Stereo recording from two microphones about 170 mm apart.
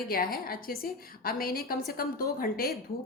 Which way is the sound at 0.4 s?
60° left (ahead or behind).